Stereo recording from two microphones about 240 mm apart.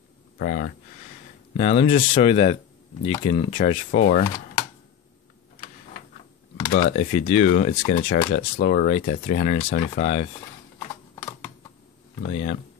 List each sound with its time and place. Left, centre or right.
0.4 s speech: left
1.6 s speech: left
6.9 s speech: left
12.2 s speech: left